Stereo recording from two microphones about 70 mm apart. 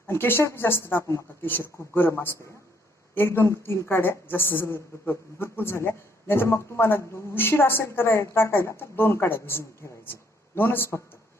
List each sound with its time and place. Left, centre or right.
0.1 s a woman's voice: left